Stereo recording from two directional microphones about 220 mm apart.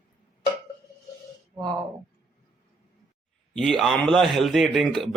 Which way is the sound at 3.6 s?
Centre (ahead or behind).